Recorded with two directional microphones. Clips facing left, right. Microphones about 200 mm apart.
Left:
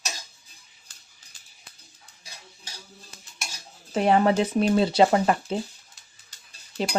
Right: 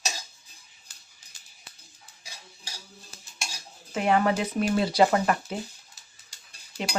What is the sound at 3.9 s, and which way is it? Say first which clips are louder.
Speech: left 3 dB; 30° left (ahead or behind).